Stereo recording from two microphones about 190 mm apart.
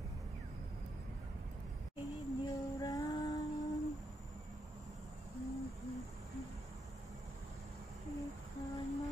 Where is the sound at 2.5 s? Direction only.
20° left (ahead or behind).